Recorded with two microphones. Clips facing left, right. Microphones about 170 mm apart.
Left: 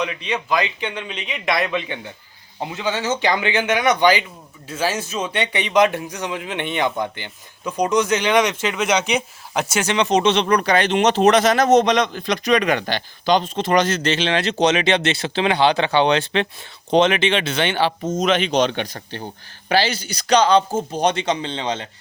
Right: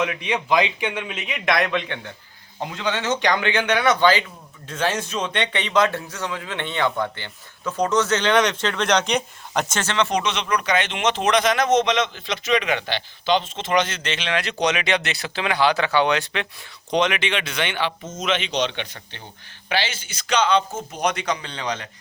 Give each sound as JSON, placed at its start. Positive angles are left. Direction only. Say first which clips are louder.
{"t": 0.0, "sound": "a man's voice", "louder": "right 1 dB", "side_deg": -10}
{"t": 18.3, "sound": "a man's voice", "louder": "left 4 dB", "side_deg": 45}